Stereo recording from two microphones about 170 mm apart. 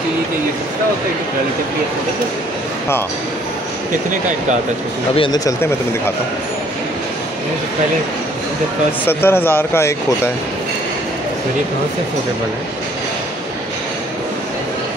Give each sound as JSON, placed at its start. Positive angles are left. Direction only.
{"t": 5.1, "sound": "speech", "side_deg": 25}
{"t": 9.0, "sound": "speech", "side_deg": 15}